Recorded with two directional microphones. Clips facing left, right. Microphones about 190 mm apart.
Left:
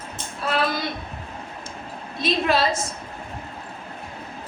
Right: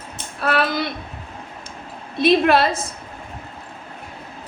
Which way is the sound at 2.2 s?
60° right (ahead or behind).